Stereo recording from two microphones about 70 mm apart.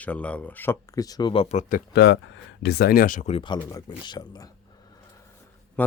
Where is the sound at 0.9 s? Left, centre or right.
Left.